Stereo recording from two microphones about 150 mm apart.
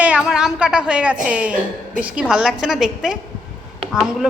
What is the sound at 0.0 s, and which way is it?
A woman's voice, 5° right (ahead or behind).